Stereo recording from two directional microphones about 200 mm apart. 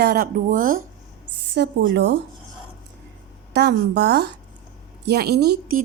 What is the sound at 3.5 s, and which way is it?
A woman's voice, 55° right (ahead or behind).